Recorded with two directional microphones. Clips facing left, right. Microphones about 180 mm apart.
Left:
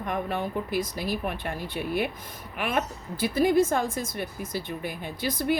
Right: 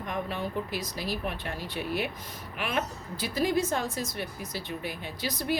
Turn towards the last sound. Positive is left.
turn(degrees=50)  # may be behind; listen again after turning